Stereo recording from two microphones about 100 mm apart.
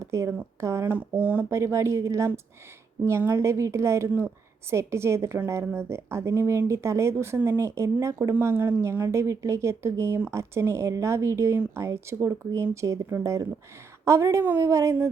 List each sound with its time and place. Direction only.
0.0 s a woman's voice: 30° right (ahead or behind)
1.5 s a woman's voice: 30° right (ahead or behind)